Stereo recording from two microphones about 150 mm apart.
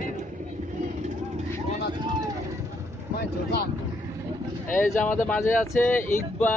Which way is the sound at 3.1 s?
90° left.